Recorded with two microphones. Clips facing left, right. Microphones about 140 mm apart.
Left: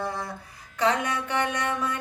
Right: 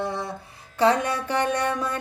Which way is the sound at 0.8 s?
30° right (ahead or behind).